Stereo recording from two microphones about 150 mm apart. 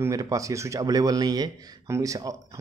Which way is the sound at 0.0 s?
25° right (ahead or behind).